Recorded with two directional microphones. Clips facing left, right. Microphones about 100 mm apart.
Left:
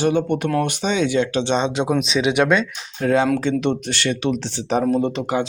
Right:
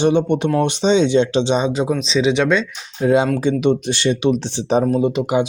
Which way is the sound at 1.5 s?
5° right (ahead or behind).